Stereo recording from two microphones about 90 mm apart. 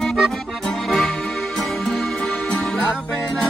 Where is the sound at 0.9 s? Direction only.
5° left (ahead or behind).